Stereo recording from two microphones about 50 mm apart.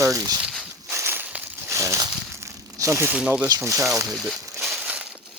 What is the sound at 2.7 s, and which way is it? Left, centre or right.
Speech, right.